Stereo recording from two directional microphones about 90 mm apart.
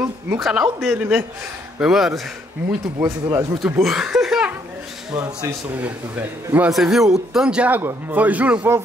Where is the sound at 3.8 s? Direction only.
5° right (ahead or behind).